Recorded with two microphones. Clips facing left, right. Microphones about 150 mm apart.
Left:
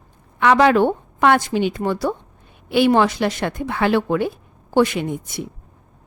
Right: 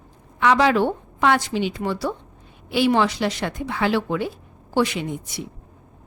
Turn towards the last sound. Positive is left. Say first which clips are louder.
# left 4 dB
turn(degrees=50)  # may be behind; listen again after turning